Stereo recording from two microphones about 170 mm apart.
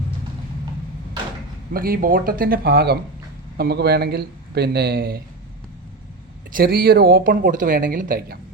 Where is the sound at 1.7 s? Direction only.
60° right (ahead or behind).